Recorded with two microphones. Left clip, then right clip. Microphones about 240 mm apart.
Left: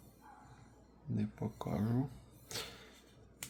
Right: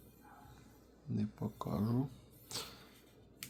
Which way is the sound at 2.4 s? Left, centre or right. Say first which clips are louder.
Left 1 dB; centre.